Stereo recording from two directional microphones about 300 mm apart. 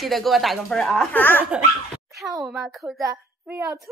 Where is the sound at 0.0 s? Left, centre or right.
Centre.